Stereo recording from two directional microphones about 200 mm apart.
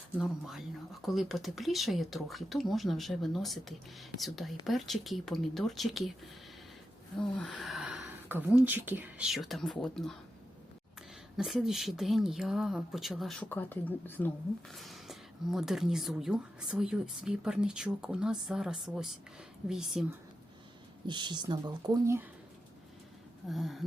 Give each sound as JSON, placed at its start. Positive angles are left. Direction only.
{"t": 0.2, "sound": "speech", "side_deg": 0}
{"t": 7.2, "sound": "a sound", "side_deg": 0}
{"t": 8.6, "sound": "speech", "side_deg": -10}
{"t": 11.3, "sound": "speech", "side_deg": 0}
{"t": 21.1, "sound": "speech", "side_deg": -20}
{"t": 23.5, "sound": "speech", "side_deg": 0}